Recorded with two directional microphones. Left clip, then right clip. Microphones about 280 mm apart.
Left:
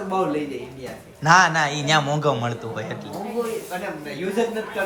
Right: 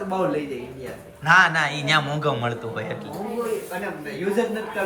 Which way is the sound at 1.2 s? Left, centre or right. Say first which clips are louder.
Left 1 dB; centre.